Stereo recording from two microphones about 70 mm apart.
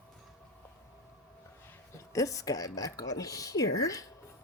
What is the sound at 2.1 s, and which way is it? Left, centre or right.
A woman's voice, left.